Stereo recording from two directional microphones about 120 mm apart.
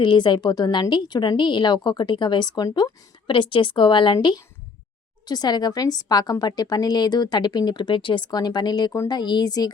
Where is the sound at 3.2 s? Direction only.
40° left (ahead or behind).